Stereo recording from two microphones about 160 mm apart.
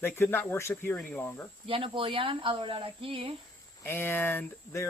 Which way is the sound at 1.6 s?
35° right (ahead or behind).